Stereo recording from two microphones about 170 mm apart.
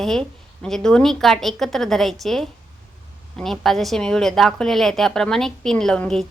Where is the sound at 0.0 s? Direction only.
5° left (ahead or behind).